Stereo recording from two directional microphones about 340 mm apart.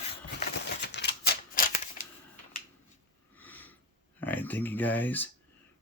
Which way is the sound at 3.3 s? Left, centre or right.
Centre.